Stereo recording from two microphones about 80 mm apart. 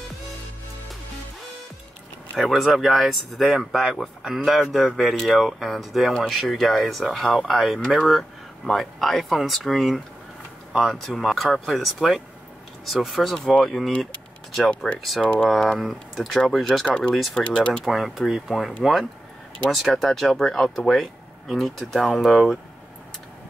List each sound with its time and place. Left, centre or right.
2.3 s speech: centre
17.1 s speech: centre
17.4 s speech: centre
19.7 s speech: centre